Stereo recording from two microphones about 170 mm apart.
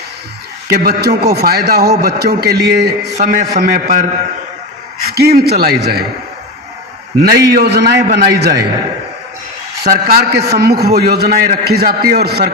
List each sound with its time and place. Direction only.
0.7 s a man's voice: 70° right (ahead or behind)
3.2 s a man's voice: 45° right (ahead or behind)
5.1 s a man's voice: 65° right (ahead or behind)
7.2 s a man's voice: 65° right (ahead or behind)
9.8 s a man's voice: 65° right (ahead or behind)